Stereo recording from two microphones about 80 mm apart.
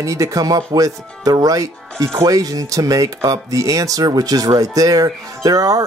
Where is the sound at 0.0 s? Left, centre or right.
Right.